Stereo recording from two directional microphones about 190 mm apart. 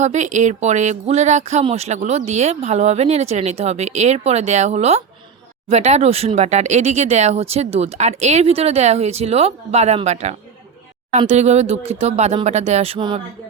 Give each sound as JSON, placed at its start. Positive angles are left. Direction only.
{"t": 0.0, "sound": "speech", "side_deg": -40}